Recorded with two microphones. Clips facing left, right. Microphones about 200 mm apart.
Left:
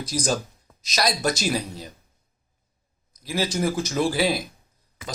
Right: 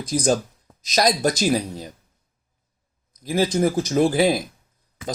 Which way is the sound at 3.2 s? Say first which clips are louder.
Right 5 dB; 50° right (ahead or behind).